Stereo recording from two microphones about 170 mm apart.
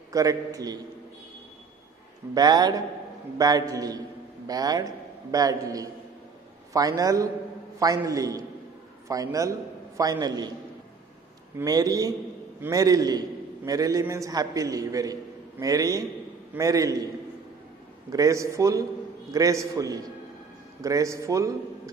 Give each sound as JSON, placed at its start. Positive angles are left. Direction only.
{"t": 0.1, "sound": "a man's voice", "side_deg": -20}
{"t": 2.3, "sound": "a man's voice", "side_deg": -25}
{"t": 11.5, "sound": "a man's voice", "side_deg": -20}
{"t": 18.1, "sound": "a man's voice", "side_deg": -20}